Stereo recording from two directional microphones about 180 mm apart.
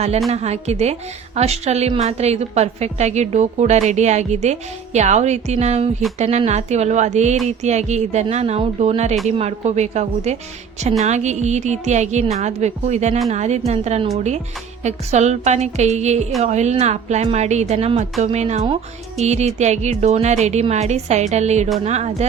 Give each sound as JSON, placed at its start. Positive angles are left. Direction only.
{"t": 0.3, "sound": "a woman's voice", "side_deg": -35}